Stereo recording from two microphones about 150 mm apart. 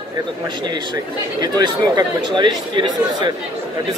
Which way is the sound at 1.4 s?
25° right (ahead or behind).